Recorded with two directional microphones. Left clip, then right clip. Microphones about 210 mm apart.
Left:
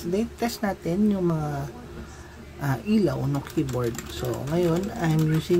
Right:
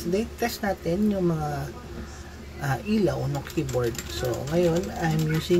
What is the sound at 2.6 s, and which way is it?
Speech, 20° left (ahead or behind).